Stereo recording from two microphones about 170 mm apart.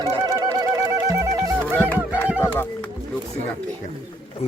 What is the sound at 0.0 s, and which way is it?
Music, 20° right (ahead or behind).